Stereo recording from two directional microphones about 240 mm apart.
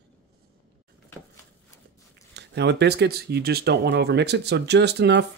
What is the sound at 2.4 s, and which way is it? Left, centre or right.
Speech, right.